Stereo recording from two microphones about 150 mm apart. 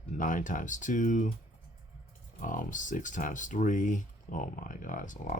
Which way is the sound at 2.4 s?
60° left (ahead or behind).